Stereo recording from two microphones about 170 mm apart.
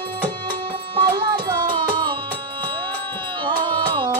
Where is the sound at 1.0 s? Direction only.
25° right (ahead or behind).